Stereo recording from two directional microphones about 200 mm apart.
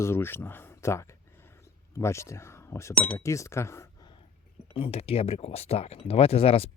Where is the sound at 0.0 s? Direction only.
10° left (ahead or behind).